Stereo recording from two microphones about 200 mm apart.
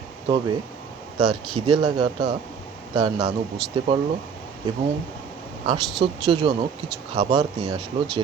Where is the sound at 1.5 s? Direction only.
30° right (ahead or behind).